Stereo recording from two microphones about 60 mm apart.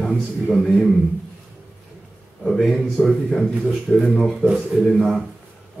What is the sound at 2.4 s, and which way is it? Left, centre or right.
A man's voice, centre.